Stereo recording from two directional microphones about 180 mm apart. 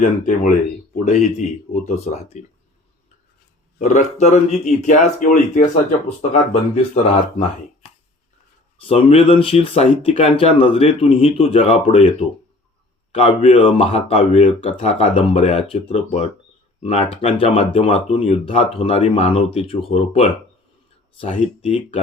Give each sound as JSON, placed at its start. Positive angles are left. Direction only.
{"t": 0.0, "sound": "speech", "side_deg": 45}
{"t": 3.8, "sound": "speech", "side_deg": 40}
{"t": 6.9, "sound": "speech", "side_deg": 30}
{"t": 13.1, "sound": "speech", "side_deg": 35}